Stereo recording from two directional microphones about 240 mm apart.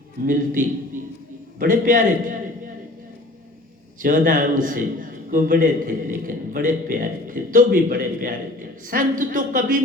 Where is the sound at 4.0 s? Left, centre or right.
Right.